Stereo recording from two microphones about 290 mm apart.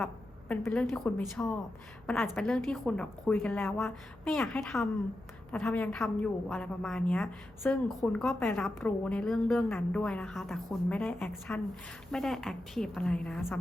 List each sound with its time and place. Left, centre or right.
0.0 s a woman's voice: centre